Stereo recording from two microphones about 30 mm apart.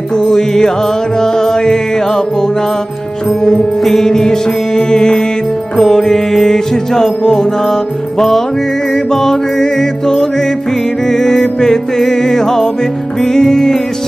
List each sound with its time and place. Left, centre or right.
0.1 s music: left
3.8 s music: centre